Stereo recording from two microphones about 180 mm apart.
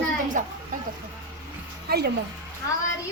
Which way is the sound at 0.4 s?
45° right (ahead or behind).